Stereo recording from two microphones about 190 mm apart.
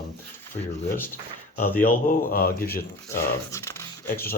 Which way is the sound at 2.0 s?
50° left (ahead or behind).